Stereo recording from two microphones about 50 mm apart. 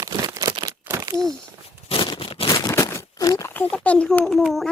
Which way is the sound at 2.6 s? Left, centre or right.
Left.